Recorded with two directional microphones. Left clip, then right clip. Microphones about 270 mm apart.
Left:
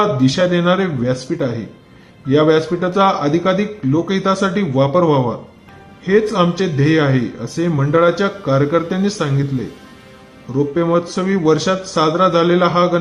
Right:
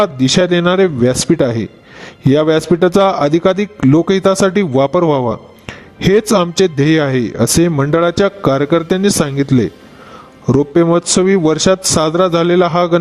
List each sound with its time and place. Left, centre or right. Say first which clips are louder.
0.0 s a man's voice: right 2 dB; right